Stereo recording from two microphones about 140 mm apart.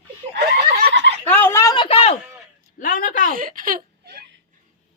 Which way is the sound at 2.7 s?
75° left (ahead or behind).